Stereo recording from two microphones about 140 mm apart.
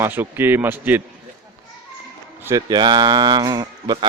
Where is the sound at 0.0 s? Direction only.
15° right (ahead or behind).